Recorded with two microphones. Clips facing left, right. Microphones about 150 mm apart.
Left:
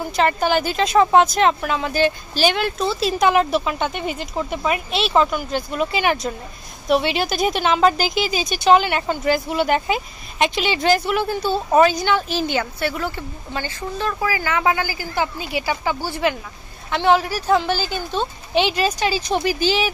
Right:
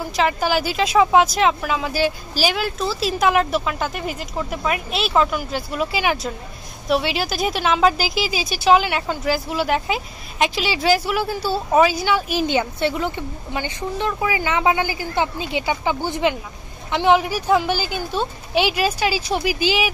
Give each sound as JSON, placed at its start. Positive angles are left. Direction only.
{"t": 0.0, "sound": "a woman's voice", "side_deg": 0}